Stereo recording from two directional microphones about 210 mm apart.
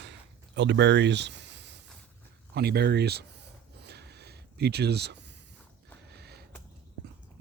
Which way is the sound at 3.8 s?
50° right (ahead or behind).